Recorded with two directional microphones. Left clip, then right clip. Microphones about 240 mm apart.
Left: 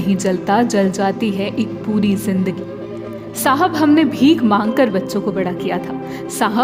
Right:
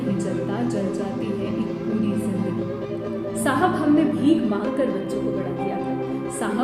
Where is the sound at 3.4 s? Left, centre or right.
Left.